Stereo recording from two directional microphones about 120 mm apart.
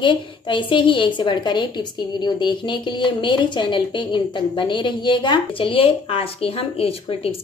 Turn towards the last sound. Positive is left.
turn(degrees=50)  # may be behind; listen again after turning